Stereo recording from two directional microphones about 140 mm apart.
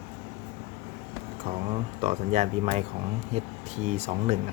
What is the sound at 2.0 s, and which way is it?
Speech, 55° right (ahead or behind).